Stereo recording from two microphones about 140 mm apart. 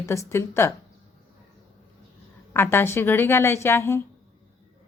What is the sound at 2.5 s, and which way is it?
A woman's voice, 15° left (ahead or behind).